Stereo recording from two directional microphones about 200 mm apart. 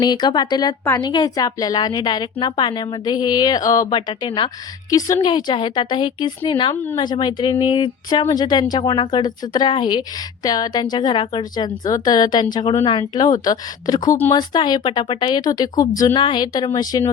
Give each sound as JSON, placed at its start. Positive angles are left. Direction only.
{"t": 0.0, "sound": "a woman's voice", "side_deg": 20}